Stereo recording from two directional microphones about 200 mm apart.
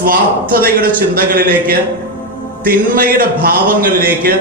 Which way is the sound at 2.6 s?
45° right (ahead or behind).